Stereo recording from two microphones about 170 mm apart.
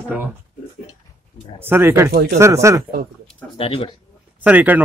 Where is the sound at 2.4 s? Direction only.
15° right (ahead or behind).